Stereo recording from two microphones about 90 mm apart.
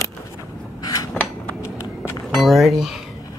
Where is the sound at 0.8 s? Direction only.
40° left (ahead or behind).